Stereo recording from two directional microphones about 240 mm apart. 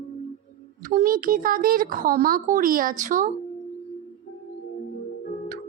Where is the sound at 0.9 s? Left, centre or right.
Right.